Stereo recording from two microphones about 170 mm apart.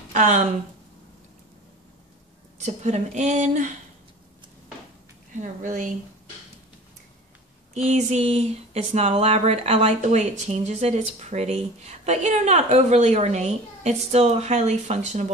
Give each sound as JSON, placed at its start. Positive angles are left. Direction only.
{"t": 0.1, "sound": "speech", "side_deg": -45}
{"t": 2.6, "sound": "a woman's voice", "side_deg": -45}
{"t": 5.4, "sound": "a woman's voice", "side_deg": -50}
{"t": 7.7, "sound": "speech", "side_deg": -40}